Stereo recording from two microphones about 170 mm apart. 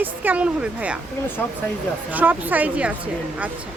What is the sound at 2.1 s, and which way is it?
Speech, 10° right (ahead or behind).